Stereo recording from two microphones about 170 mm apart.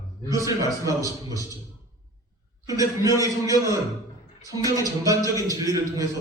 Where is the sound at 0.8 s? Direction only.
20° right (ahead or behind).